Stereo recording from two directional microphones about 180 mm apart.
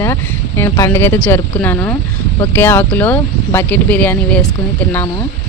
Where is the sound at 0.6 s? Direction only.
15° left (ahead or behind).